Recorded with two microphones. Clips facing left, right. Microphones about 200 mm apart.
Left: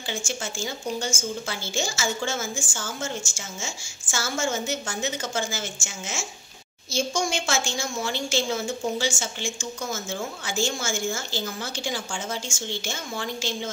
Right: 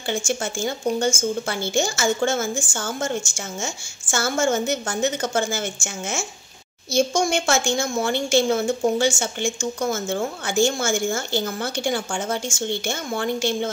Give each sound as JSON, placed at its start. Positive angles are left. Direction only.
{"t": 0.1, "sound": "a woman's voice", "side_deg": -55}